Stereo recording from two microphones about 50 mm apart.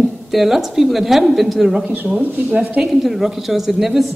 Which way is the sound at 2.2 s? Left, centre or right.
Right.